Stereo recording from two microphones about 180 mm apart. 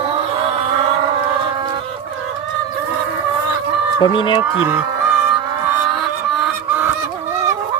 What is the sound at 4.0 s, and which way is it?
Speech, 25° left (ahead or behind).